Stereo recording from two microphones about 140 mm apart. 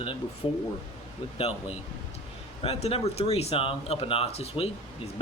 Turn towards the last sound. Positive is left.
turn(degrees=45)  # may be behind; listen again after turning